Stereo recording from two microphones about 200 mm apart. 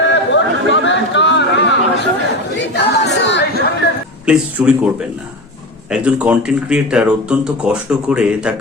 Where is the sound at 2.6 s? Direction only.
60° left (ahead or behind).